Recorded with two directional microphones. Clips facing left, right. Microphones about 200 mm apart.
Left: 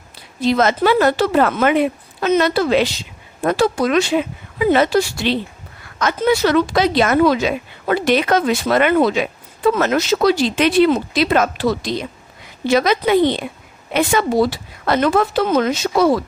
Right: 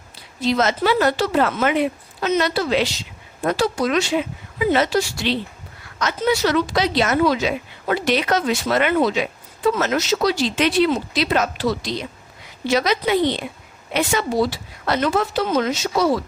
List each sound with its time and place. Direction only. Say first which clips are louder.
0.4 s speech: left 4 dB; 55° left (ahead or behind)